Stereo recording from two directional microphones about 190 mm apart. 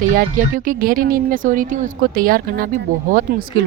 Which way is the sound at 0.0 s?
45° right (ahead or behind).